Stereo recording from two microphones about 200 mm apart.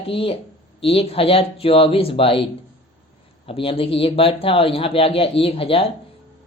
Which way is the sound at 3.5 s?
25° left (ahead or behind).